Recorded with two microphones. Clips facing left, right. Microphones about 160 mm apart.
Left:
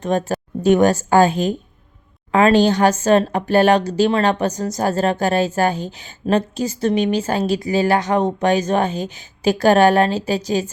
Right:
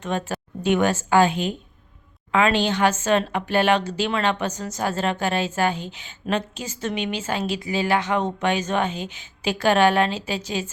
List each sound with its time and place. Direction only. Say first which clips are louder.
0.0 s speech: left 7 dB; 40° left (ahead or behind)